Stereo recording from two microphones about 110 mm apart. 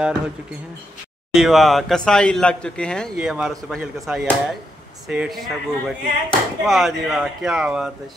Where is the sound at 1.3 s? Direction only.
Centre (ahead or behind).